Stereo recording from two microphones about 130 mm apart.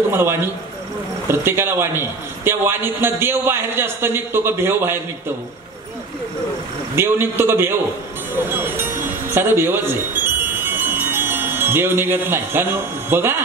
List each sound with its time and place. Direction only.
0.1 s a man's voice: 15° right (ahead or behind)
7.0 s a man's voice: 20° right (ahead or behind)
8.4 s music: 15° right (ahead or behind)
13.1 s a man's voice: 15° right (ahead or behind)